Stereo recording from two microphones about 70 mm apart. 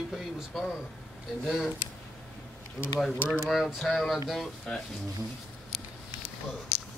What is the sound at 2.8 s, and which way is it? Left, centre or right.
Speech, centre.